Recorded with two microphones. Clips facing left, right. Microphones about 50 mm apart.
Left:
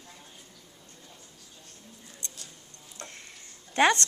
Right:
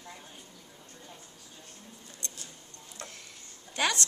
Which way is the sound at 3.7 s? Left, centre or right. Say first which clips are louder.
Left 8 dB; left.